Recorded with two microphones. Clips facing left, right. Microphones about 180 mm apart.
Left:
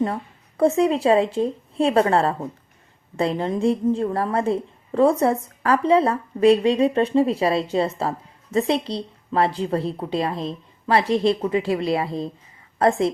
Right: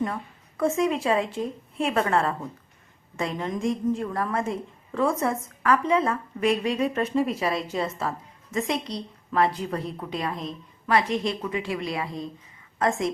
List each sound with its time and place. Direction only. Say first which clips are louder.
0.0 s a woman's voice: left 5 dB; 30° left (ahead or behind)